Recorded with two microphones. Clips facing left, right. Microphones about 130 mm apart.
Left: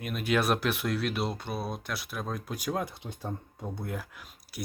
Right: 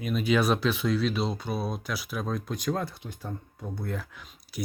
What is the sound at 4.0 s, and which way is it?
Speech, 5° left (ahead or behind).